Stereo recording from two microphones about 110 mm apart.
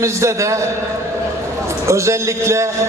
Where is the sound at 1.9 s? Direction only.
25° right (ahead or behind).